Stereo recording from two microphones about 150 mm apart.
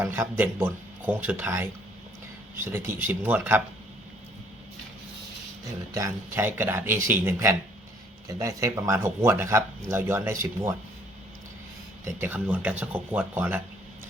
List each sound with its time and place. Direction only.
0.0 s speech: 15° right (ahead or behind)
2.7 s speech: 15° right (ahead or behind)
5.9 s speech: 20° right (ahead or behind)
12.2 s speech: 10° right (ahead or behind)